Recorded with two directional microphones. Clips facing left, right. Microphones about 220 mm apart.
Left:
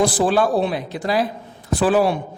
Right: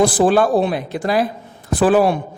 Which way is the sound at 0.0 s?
50° right (ahead or behind).